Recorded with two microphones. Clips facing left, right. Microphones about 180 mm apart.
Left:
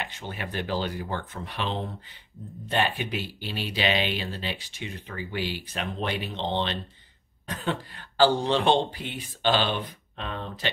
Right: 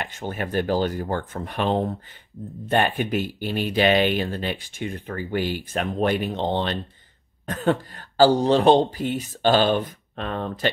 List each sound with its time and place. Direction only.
0.0 s speech: 45° right (ahead or behind)